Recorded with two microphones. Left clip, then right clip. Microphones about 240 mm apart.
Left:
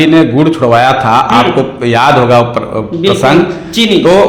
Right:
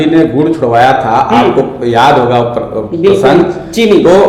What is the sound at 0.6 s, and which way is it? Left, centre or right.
A man's voice, left.